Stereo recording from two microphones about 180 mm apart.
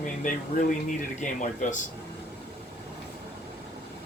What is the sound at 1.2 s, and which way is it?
Speech, 40° left (ahead or behind).